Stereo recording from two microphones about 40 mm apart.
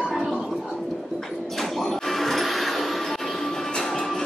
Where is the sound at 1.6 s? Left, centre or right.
Centre.